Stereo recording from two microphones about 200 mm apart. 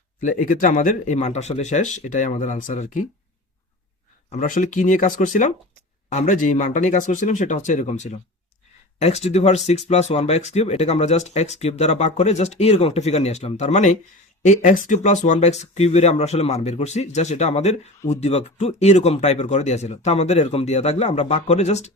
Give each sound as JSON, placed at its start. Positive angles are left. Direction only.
{"t": 0.2, "sound": "speech", "side_deg": 40}
{"t": 4.3, "sound": "speech", "side_deg": 40}